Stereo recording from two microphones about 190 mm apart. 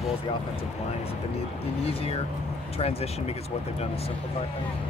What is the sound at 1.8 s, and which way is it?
Speech, 30° left (ahead or behind).